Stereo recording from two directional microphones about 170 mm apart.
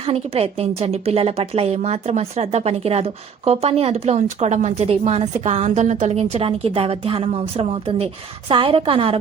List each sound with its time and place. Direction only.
0.0 s speech: 35° right (ahead or behind)